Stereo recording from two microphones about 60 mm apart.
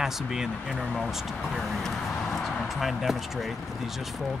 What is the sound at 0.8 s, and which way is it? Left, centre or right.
Speech, centre.